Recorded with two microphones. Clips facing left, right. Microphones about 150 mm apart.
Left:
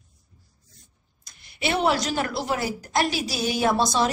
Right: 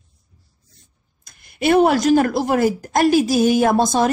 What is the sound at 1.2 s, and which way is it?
A woman's voice, 50° right (ahead or behind).